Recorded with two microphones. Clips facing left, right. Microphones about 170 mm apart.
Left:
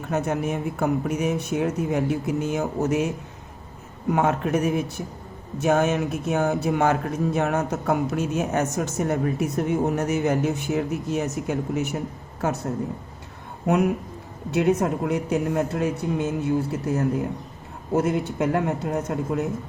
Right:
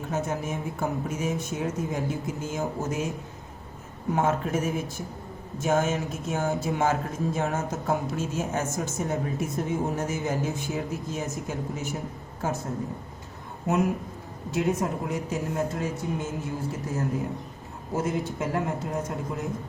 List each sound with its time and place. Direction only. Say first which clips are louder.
0.1 s speech: left 5 dB; 65° left (ahead or behind)
4.1 s a man's voice: left 3 dB; 65° left (ahead or behind)
14.5 s a man's voice: left 5 dB; 65° left (ahead or behind)